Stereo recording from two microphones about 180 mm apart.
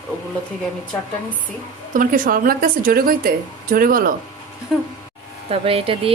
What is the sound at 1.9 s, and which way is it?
Speech, 50° right (ahead or behind).